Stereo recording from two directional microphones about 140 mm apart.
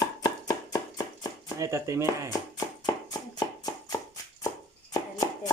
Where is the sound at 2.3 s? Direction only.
30° left (ahead or behind).